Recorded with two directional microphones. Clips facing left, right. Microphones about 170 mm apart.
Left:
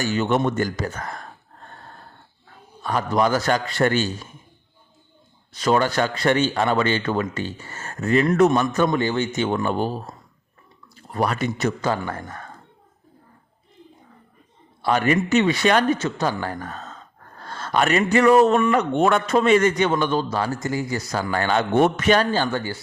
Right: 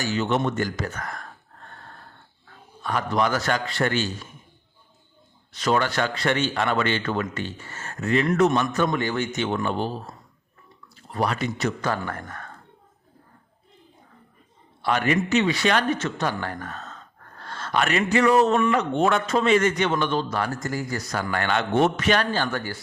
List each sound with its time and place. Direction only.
0.0 s speech: 50° left (ahead or behind)
0.9 s speech: 30° left (ahead or behind)
2.8 s speech: 35° left (ahead or behind)
5.6 s speech: 40° left (ahead or behind)
9.4 s speech: 40° left (ahead or behind)
11.1 s speech: 45° left (ahead or behind)
14.8 s speech: 40° left (ahead or behind)
16.2 s speech: 35° left (ahead or behind)
20.5 s speech: centre (ahead or behind)
20.9 s speech: 30° left (ahead or behind); by 22.3 s 45° left (ahead or behind)
22.4 s speech: 20° left (ahead or behind)